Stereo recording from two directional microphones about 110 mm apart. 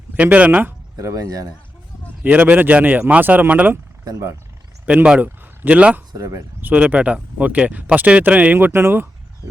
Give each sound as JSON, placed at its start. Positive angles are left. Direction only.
{"t": 0.2, "sound": "speech", "side_deg": -15}
{"t": 0.9, "sound": "speech", "side_deg": -35}
{"t": 2.2, "sound": "speech", "side_deg": -15}
{"t": 4.9, "sound": "speech", "side_deg": -10}
{"t": 6.1, "sound": "speech", "side_deg": -25}